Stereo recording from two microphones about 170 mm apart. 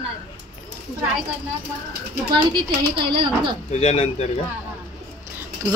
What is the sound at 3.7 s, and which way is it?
Speech, 35° left (ahead or behind).